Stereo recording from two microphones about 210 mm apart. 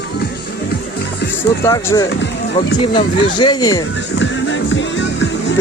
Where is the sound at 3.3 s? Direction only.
20° left (ahead or behind).